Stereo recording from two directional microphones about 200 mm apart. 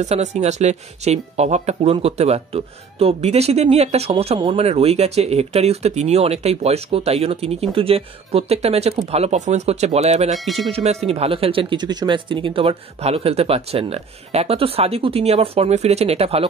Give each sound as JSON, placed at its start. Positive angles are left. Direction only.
{"t": 0.0, "sound": "speech", "side_deg": -35}
{"t": 10.3, "sound": "speech", "side_deg": 0}
{"t": 10.7, "sound": "speech", "side_deg": -30}